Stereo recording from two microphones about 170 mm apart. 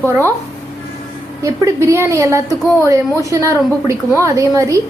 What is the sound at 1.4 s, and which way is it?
A woman's voice, 20° right (ahead or behind).